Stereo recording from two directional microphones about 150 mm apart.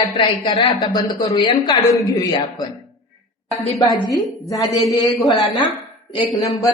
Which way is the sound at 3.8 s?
Centre (ahead or behind).